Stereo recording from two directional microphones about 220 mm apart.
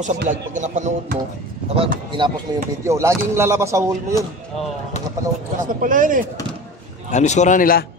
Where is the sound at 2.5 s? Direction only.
20° right (ahead or behind).